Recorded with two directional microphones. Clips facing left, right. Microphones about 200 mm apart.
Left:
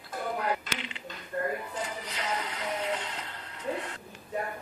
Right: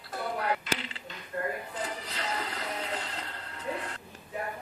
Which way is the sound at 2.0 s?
35° right (ahead or behind).